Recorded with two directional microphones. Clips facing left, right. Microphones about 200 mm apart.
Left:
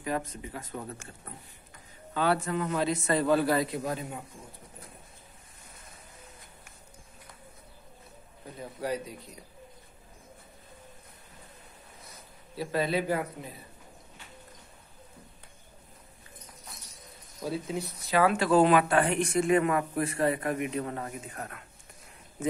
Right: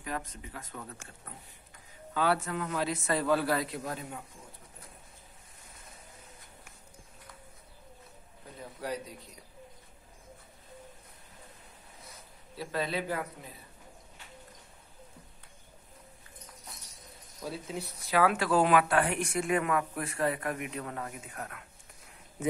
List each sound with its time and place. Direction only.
0.0 s speech: 5° left (ahead or behind)
0.6 s a man's voice: 20° left (ahead or behind)
2.1 s speech: 5° right (ahead or behind)
12.5 s speech: 5° left (ahead or behind)
17.4 s speech: centre (ahead or behind)
20.2 s a man's voice: 25° left (ahead or behind)
20.5 s speech: centre (ahead or behind)